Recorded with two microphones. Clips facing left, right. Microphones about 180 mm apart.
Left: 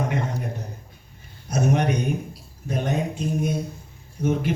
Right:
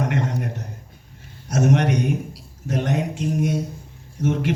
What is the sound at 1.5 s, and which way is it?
A man's voice, 90° right.